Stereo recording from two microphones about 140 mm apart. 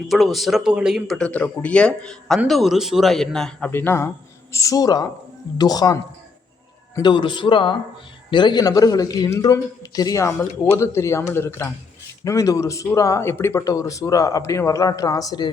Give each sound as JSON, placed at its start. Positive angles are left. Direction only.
{"t": 0.1, "sound": "speech", "side_deg": 0}
{"t": 3.7, "sound": "a man's voice", "side_deg": 15}
{"t": 7.0, "sound": "a man's voice", "side_deg": 35}